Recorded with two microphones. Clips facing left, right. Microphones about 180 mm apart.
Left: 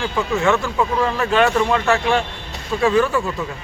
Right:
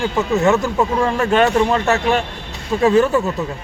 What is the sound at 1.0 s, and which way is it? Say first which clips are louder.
Speech: right 2 dB; 45° right (ahead or behind).